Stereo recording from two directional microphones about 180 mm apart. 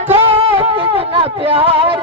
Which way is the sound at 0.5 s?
30° right (ahead or behind).